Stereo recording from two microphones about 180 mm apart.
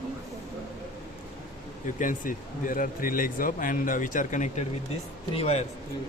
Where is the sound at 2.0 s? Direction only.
50° left (ahead or behind).